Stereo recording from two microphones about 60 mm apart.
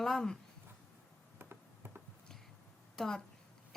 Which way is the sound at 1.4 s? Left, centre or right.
Right.